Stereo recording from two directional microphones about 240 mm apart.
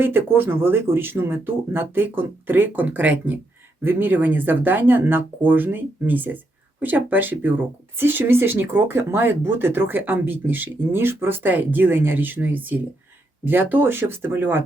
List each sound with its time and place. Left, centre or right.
0.0 s speech: centre